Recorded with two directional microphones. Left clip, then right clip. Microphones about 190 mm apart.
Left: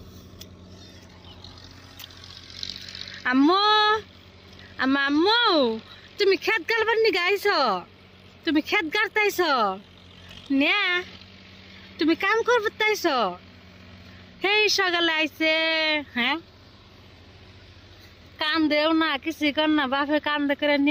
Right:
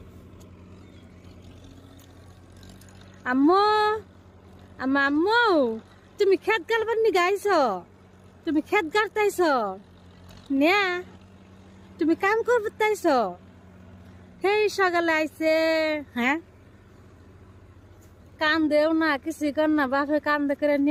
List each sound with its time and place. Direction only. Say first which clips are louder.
2.2 s vehicle: left 15 dB; 50° right (ahead or behind)
3.2 s speech: even; centre (ahead or behind)
14.5 s speech: left 1 dB; 10° right (ahead or behind)
18.3 s speech: right 1 dB; 5° right (ahead or behind)